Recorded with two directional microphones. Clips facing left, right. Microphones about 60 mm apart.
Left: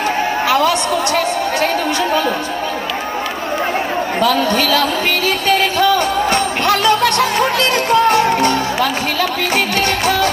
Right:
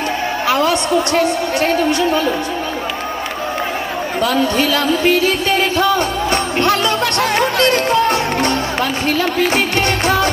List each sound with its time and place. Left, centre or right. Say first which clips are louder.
0.5 s a woman's voice: right 1 dB; right
4.2 s a woman's voice: even; right
5.8 s music: left 2 dB; right
9.8 s music: left 1 dB; right